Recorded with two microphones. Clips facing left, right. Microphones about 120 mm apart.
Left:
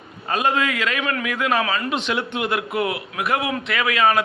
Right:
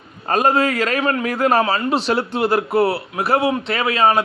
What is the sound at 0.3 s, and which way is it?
A man's voice, 40° right (ahead or behind).